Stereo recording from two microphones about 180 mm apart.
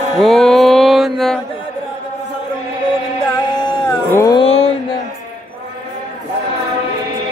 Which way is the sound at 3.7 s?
25° left (ahead or behind).